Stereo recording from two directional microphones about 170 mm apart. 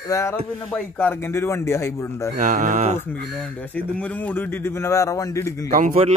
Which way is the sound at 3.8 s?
10° left (ahead or behind).